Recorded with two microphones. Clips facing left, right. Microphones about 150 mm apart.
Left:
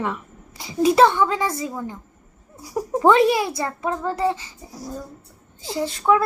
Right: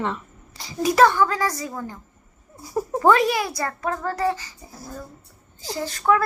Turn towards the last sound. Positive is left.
turn(degrees=25)  # may be behind; listen again after turning